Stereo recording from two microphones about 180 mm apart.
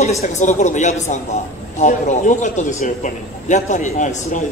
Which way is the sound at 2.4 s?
40° left (ahead or behind).